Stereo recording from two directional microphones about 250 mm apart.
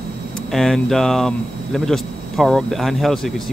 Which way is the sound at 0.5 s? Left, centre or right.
Centre.